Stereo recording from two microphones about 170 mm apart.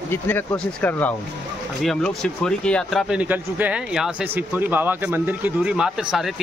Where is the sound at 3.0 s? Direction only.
5° right (ahead or behind).